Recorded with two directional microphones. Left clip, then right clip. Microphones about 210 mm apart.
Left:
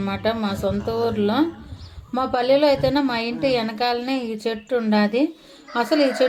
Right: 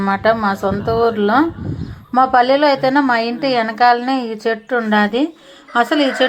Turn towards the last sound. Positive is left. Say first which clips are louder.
# right 4 dB
turn(degrees=-15)  # may be behind; listen again after turning